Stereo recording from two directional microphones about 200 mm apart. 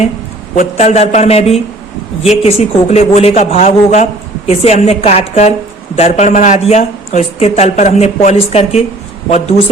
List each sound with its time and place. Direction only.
0.5 s a man's voice: 35° left (ahead or behind)